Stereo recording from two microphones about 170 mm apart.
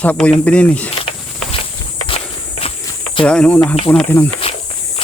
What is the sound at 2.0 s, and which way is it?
Walk, 35° left (ahead or behind).